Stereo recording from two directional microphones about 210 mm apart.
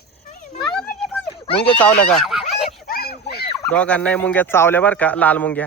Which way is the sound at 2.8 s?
45° left (ahead or behind).